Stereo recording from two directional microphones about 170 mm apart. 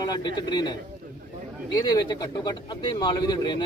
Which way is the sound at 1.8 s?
25° left (ahead or behind).